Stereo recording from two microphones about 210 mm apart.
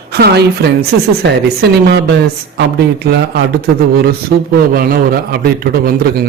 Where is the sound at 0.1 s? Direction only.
50° right (ahead or behind).